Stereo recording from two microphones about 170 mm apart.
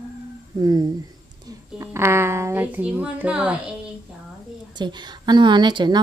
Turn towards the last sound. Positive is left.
turn(degrees=-25)  # may be behind; listen again after turning